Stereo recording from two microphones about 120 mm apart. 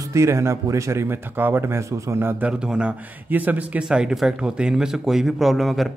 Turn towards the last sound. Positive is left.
turn(degrees=0)  # may be behind; listen again after turning